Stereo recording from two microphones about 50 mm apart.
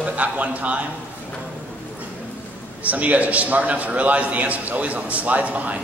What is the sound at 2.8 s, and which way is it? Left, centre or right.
A man's voice, right.